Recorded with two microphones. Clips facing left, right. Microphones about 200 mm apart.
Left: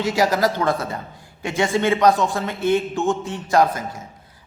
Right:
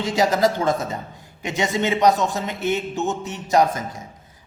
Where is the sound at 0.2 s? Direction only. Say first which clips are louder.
Right 2 dB; 25° right (ahead or behind).